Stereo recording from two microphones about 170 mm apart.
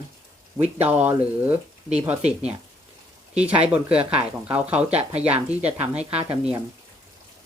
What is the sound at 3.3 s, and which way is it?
A woman's voice, 5° right (ahead or behind).